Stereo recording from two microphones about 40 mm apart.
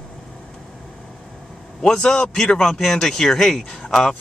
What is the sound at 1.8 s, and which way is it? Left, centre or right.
Speech, centre.